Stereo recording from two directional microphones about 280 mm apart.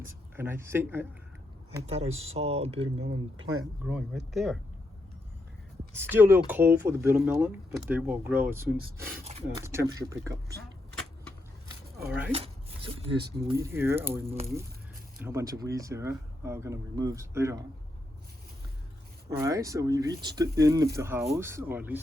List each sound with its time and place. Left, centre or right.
0.0 s speech: centre
1.7 s speech: right
3.8 s speech: centre
6.0 s speech: centre
9.2 s speech: right
9.6 s speech: centre
10.6 s vehicle: centre
12.0 s speech: centre
12.3 s speech: right
14.3 s speech: right
15.2 s speech: centre
19.4 s speech: centre